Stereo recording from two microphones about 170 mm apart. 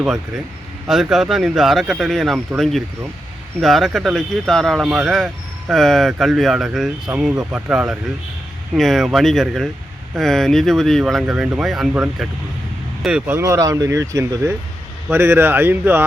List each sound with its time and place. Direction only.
0.0 s speech: 5° right (ahead or behind)